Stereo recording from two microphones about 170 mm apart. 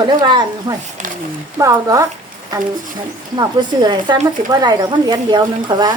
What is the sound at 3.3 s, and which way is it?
Speech, 25° right (ahead or behind).